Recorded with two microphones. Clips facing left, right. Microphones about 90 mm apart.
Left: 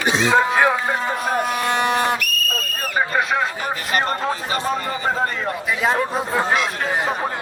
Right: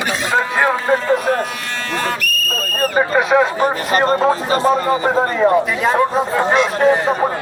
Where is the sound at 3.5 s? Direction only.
35° right (ahead or behind).